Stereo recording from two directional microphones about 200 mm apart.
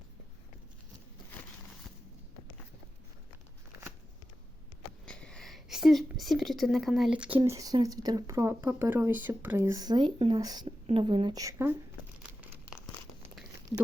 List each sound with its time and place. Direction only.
5.0 s a woman's voice: 5° left (ahead or behind); by 11.8 s 10° right (ahead or behind)